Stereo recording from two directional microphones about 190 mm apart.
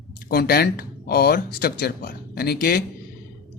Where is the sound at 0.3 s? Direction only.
55° left (ahead or behind).